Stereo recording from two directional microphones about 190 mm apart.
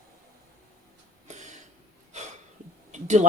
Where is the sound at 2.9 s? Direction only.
40° right (ahead or behind).